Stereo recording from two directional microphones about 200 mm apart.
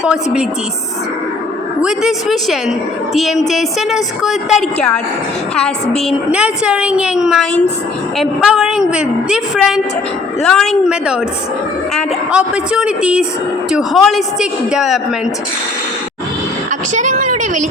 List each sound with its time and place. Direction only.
0.0 s a woman's voice: 5° right (ahead or behind)
1.8 s a woman's voice: 5° right (ahead or behind)
16.9 s a sound: 40° right (ahead or behind)